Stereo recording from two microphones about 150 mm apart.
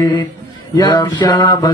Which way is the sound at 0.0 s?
20° left (ahead or behind).